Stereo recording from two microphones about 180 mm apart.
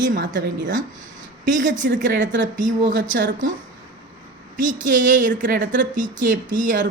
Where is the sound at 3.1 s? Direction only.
85° right.